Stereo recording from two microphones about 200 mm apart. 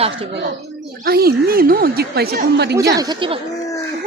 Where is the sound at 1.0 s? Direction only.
50° right (ahead or behind).